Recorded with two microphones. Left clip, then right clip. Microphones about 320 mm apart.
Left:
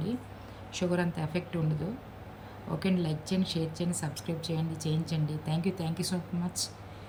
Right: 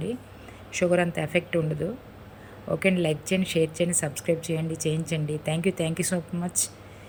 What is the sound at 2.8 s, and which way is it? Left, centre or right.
Speech, right.